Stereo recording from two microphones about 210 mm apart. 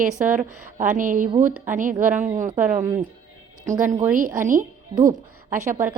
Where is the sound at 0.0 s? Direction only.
40° right (ahead or behind).